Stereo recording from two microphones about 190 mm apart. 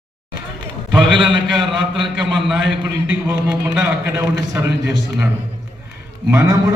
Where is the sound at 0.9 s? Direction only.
Centre (ahead or behind).